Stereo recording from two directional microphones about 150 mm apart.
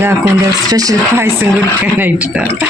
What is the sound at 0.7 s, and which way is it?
Speech, 25° right (ahead or behind).